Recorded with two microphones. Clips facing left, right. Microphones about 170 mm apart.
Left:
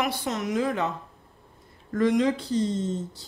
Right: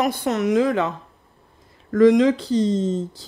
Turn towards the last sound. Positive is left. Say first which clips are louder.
# right 7 dB
turn(degrees=-90)